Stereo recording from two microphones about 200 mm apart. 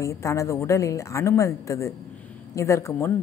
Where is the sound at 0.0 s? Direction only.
15° left (ahead or behind).